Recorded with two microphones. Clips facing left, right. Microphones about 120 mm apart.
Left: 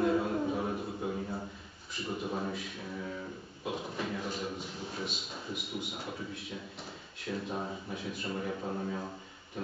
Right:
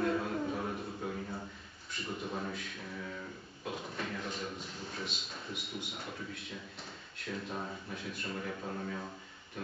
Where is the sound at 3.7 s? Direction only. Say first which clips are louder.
Left 4 dB; 5° left (ahead or behind).